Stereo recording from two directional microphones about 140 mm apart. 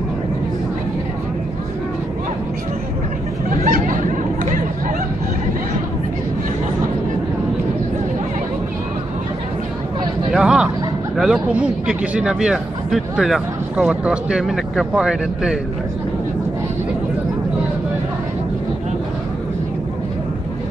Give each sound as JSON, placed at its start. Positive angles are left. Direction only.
{"t": 3.4, "sound": "a sound", "side_deg": -70}
{"t": 10.3, "sound": "vehicle", "side_deg": -5}
{"t": 11.1, "sound": "speech", "side_deg": -5}